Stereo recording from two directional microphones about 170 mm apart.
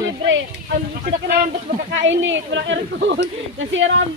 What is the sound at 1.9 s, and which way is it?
Speech, 90° right.